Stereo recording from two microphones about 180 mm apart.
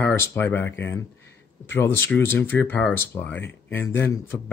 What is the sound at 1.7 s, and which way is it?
Speech, 10° left (ahead or behind).